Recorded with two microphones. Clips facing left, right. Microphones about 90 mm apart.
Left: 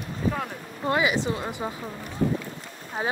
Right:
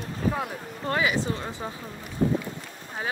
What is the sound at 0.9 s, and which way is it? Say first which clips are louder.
Speech: left 2 dB; 20° left (ahead or behind).